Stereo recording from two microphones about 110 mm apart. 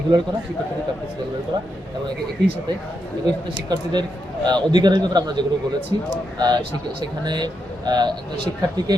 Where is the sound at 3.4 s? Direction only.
45° right (ahead or behind).